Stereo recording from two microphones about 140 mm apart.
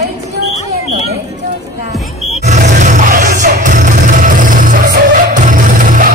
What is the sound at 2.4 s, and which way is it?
Music, 60° right (ahead or behind).